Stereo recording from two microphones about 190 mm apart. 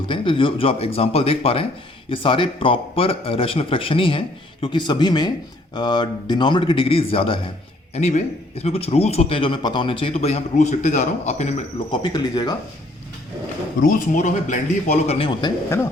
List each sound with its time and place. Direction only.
0.1 s a man's voice: 25° left (ahead or behind)
13.8 s a man's voice: 45° left (ahead or behind); by 15.9 s 20° left (ahead or behind)